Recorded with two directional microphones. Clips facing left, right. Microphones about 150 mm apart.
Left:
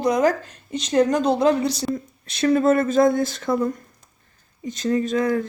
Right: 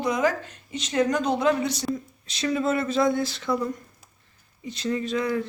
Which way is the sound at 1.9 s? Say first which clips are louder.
Left 7 dB; 55° left (ahead or behind).